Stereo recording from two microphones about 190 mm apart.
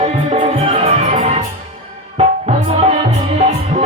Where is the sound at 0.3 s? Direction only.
30° right (ahead or behind).